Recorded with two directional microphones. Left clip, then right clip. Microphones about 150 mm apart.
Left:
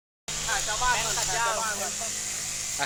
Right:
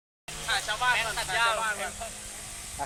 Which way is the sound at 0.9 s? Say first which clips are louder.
Even; 15° right (ahead or behind).